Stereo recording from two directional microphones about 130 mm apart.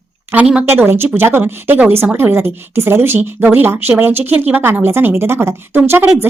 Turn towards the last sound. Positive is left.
turn(degrees=-20)  # may be behind; listen again after turning